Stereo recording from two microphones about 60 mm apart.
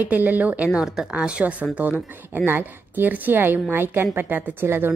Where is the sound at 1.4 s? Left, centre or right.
Right.